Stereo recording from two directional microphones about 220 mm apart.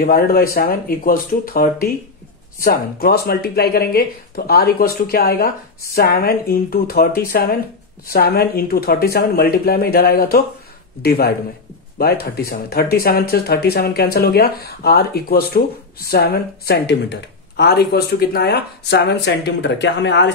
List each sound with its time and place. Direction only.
0.0 s speech: 45° left (ahead or behind)